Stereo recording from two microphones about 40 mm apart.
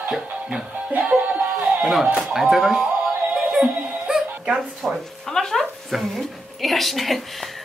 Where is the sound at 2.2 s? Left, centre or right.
Centre.